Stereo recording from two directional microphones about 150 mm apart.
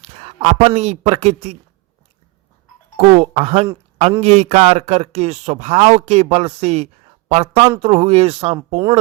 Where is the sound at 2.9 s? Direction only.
45° right (ahead or behind).